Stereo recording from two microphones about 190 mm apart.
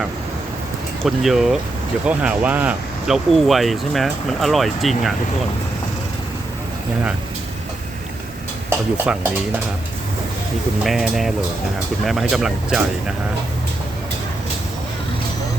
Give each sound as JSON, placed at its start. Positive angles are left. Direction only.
{"t": 1.0, "sound": "speech", "side_deg": 0}
{"t": 9.1, "sound": "speech", "side_deg": -5}
{"t": 10.8, "sound": "speech", "side_deg": 0}